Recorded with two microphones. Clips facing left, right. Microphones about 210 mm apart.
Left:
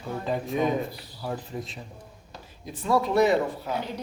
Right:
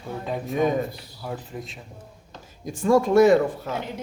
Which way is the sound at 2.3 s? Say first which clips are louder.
Even; 10° left (ahead or behind).